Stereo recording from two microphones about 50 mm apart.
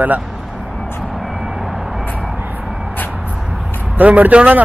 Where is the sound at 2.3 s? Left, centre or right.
Right.